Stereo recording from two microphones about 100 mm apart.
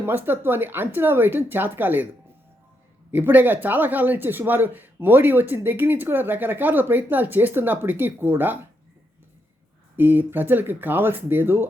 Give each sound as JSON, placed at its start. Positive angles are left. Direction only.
{"t": 0.0, "sound": "speech", "side_deg": -20}
{"t": 3.1, "sound": "speech", "side_deg": -20}
{"t": 10.0, "sound": "speech", "side_deg": -20}